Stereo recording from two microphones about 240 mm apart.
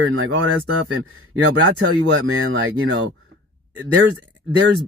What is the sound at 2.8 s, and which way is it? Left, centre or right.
Speech, right.